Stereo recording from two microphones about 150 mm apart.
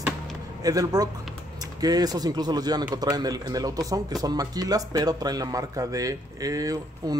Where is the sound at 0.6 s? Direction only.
25° right (ahead or behind).